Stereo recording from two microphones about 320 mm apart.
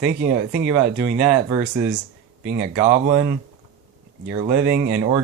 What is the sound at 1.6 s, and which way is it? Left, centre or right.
Speech, right.